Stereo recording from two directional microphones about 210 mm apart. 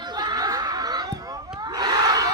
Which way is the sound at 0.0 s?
20° right (ahead or behind).